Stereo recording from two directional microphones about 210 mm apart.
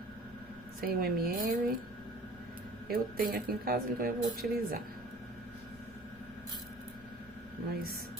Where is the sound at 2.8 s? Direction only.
45° right (ahead or behind).